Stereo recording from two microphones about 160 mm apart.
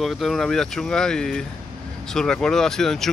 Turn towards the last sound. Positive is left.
turn(degrees=5)  # may be behind; listen again after turning